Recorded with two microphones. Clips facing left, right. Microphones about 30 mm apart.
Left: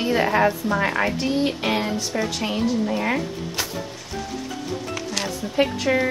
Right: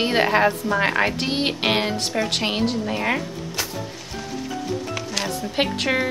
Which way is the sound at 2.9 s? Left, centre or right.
Right.